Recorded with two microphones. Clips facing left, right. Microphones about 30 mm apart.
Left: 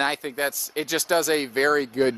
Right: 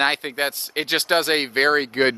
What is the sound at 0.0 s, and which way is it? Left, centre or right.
Speech, right.